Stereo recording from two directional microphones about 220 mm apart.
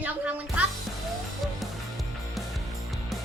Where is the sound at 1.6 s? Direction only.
Centre (ahead or behind).